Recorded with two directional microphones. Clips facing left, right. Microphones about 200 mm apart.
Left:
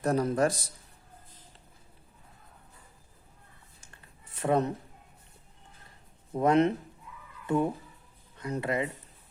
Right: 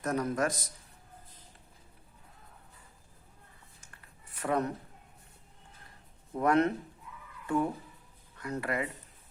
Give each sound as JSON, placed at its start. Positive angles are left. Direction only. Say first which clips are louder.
{"t": 0.0, "sound": "a man's voice", "louder": "left 4 dB", "side_deg": 30}
{"t": 3.8, "sound": "a sound", "louder": "left 1 dB", "side_deg": 25}
{"t": 6.3, "sound": "speech", "louder": "left 3 dB", "side_deg": 20}